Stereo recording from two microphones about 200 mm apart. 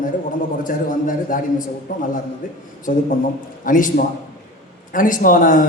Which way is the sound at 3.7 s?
40° left (ahead or behind).